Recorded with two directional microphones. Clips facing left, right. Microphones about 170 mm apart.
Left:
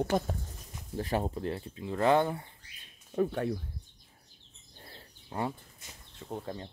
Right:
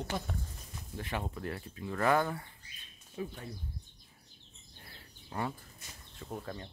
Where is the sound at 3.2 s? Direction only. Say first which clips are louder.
Left 11 dB; 70° left (ahead or behind).